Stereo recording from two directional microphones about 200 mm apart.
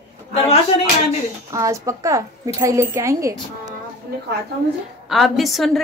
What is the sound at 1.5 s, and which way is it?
A woman's voice, 15° right (ahead or behind).